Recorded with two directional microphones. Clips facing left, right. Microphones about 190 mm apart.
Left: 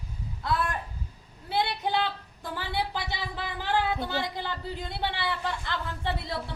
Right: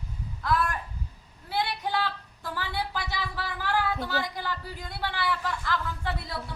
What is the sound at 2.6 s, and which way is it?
Speech, 20° left (ahead or behind).